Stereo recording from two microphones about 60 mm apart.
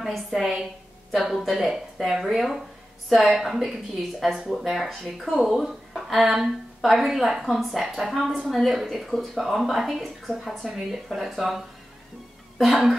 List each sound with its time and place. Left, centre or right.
0.0 s speech: centre